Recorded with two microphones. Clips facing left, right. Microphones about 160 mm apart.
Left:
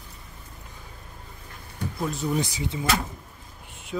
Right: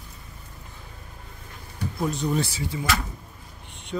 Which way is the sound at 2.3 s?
15° left (ahead or behind).